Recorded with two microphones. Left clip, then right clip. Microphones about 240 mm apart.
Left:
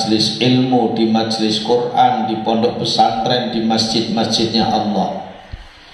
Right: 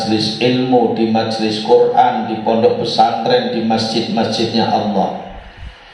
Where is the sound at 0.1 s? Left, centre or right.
Left.